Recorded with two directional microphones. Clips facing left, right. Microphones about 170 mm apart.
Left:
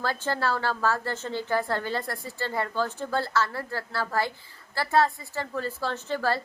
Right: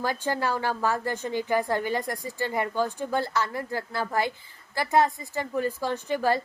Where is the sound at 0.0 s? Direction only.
15° right (ahead or behind).